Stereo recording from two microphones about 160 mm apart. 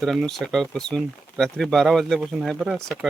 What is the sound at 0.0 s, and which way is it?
Speech, centre (ahead or behind).